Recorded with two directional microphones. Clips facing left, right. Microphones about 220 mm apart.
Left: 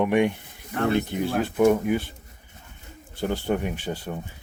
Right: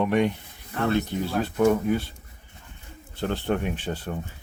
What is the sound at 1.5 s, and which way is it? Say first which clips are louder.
Speech: left 1 dB; 10° left (ahead or behind).